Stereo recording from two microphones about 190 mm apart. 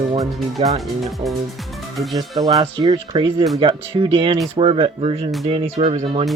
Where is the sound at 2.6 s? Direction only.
20° right (ahead or behind).